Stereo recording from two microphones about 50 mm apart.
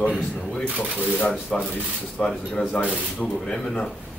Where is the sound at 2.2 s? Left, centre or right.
Centre.